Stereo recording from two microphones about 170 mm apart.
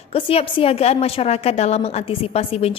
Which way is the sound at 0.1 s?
35° left (ahead or behind).